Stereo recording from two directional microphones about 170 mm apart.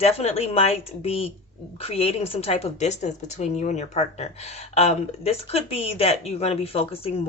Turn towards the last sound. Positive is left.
turn(degrees=35)  # may be behind; listen again after turning